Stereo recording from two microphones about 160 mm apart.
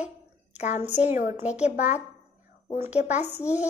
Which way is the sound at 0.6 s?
45° left (ahead or behind).